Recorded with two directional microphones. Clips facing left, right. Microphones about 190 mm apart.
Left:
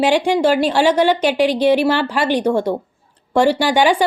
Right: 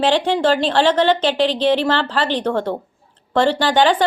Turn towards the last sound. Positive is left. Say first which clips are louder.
# left 1 dB
turn(degrees=10)  # may be behind; listen again after turning